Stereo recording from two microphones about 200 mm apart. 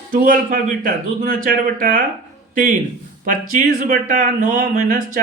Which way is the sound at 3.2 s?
45° right (ahead or behind).